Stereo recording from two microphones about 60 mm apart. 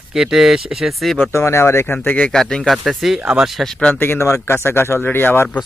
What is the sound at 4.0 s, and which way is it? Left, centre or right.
Speech, left.